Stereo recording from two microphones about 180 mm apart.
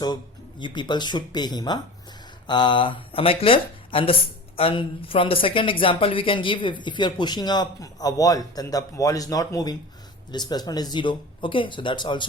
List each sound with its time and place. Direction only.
0.6 s speech: 25° left (ahead or behind)